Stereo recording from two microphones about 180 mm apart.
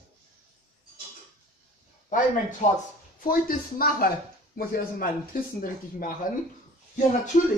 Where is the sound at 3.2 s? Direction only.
55° left (ahead or behind).